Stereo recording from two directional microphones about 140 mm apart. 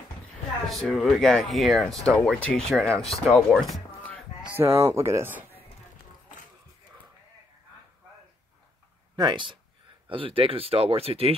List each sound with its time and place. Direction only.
0.7 s speech: centre (ahead or behind)
4.6 s speech: 20° right (ahead or behind)
9.1 s speech: 35° right (ahead or behind)